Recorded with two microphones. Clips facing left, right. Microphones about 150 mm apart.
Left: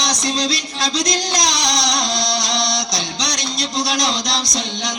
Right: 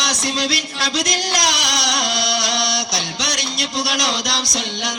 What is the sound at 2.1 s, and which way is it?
Music, 20° left (ahead or behind).